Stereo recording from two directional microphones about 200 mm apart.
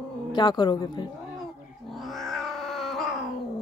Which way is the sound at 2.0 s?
Centre (ahead or behind).